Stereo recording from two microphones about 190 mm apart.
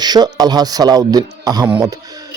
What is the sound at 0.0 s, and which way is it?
Speech, 20° right (ahead or behind).